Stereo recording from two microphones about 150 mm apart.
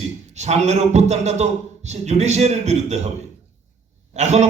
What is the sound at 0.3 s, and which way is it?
A man's voice, 50° right (ahead or behind).